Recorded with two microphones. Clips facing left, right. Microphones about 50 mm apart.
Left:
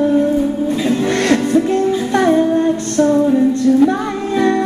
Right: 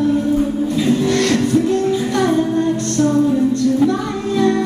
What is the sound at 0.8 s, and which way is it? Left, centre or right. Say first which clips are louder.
Music: left 1 dB; left.